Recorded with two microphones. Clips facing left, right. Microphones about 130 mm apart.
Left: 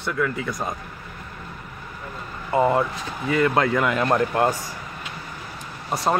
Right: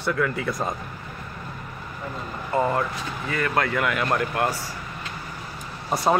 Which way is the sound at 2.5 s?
20° left (ahead or behind).